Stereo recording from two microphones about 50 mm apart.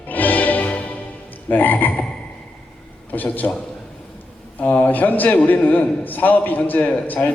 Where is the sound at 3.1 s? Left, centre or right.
Left.